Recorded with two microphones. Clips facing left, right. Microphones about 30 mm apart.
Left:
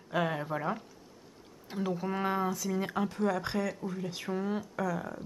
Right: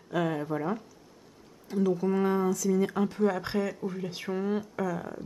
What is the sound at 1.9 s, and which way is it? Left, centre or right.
Speech, centre.